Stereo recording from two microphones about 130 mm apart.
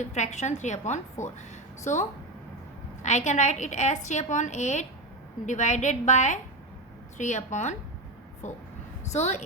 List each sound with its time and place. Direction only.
0.0 s a woman's voice: 65° left (ahead or behind)